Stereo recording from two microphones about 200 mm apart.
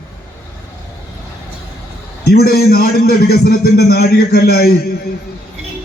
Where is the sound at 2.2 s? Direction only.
50° left (ahead or behind).